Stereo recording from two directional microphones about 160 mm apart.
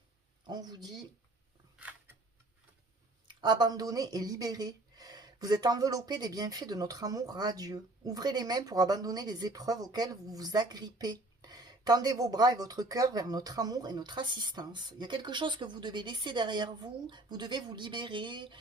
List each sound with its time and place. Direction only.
0.4 s speech: 25° right (ahead or behind)
3.2 s speech: 30° right (ahead or behind)